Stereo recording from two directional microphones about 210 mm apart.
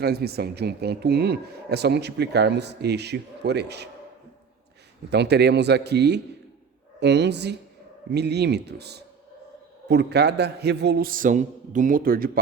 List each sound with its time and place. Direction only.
0.0 s speech: 50° right (ahead or behind)
5.1 s speech: 55° right (ahead or behind)